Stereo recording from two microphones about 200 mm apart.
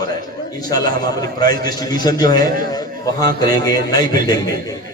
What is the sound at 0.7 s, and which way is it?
A man's voice, 20° left (ahead or behind).